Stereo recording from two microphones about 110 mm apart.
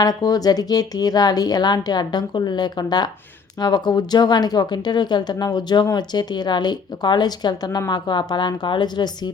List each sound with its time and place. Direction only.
0.0 s speech: 35° left (ahead or behind)